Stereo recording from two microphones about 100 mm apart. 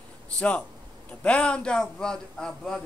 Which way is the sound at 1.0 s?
10° left (ahead or behind).